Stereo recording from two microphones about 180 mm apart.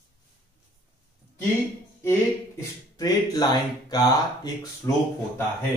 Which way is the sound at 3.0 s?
25° left (ahead or behind).